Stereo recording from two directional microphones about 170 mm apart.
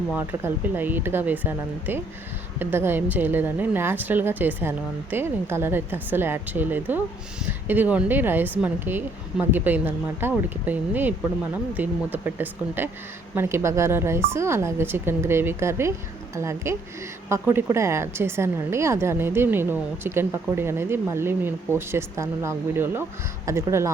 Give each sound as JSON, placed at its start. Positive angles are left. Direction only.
{"t": 0.1, "sound": "a woman's voice", "side_deg": -10}